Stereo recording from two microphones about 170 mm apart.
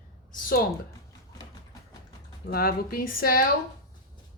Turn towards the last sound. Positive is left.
turn(degrees=60)  # may be behind; listen again after turning